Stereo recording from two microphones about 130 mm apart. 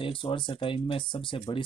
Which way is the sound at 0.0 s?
40° left (ahead or behind).